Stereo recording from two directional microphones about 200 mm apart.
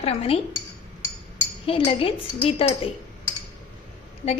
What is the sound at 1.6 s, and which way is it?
A woman's voice, 30° left (ahead or behind).